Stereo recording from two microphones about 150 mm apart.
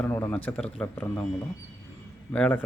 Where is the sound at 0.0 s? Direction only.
15° left (ahead or behind).